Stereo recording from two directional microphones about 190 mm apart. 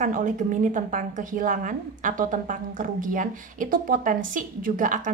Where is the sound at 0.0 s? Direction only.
40° right (ahead or behind).